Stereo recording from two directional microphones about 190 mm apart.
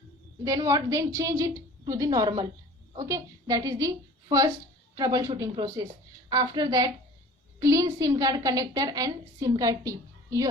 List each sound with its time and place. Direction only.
0.4 s a woman's voice: 20° right (ahead or behind)